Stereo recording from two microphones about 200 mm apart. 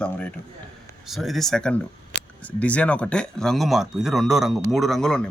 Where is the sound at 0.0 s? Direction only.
5° left (ahead or behind).